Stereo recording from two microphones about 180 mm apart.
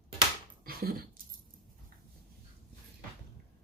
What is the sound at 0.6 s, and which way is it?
Dog, 55° right (ahead or behind).